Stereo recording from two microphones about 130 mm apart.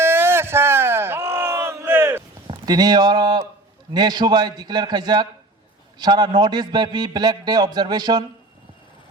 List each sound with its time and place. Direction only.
0.0 s battle cry: 20° right (ahead or behind)
2.5 s a man's voice: 30° right (ahead or behind)